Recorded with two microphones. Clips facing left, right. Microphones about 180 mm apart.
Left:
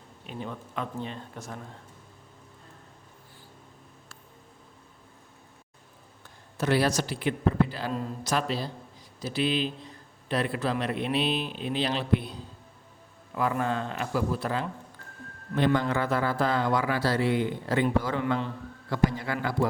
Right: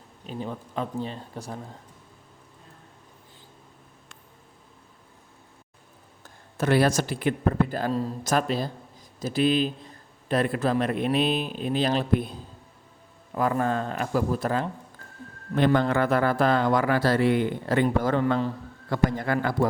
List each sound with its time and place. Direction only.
0.3 s speech: 35° right (ahead or behind)
6.6 s a man's voice: 50° right (ahead or behind)
15.5 s a man's voice: 55° right (ahead or behind)